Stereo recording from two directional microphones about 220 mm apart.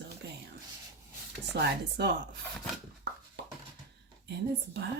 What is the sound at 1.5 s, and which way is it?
Speech, 50° right (ahead or behind).